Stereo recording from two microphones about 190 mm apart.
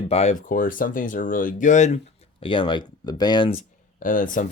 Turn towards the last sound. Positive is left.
turn(degrees=45)  # may be behind; listen again after turning